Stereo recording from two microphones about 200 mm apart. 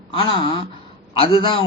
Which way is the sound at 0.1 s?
25° left (ahead or behind).